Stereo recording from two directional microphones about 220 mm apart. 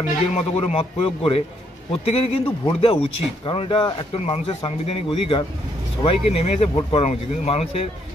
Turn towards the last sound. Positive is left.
turn(degrees=25)  # may be behind; listen again after turning